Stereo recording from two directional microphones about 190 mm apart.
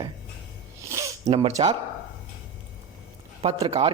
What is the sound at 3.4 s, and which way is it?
Speech, 30° right (ahead or behind).